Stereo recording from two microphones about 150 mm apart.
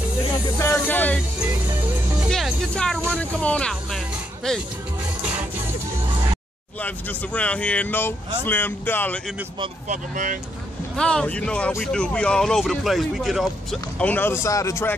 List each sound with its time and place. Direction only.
0.6 s music: 15° left (ahead or behind)
1.4 s music: 10° right (ahead or behind)
2.2 s music: centre (ahead or behind)
3.2 s speech: 5° left (ahead or behind)
6.8 s speech: 10° left (ahead or behind)
9.8 s speech: 60° right (ahead or behind)
11.0 s speech: 5° left (ahead or behind)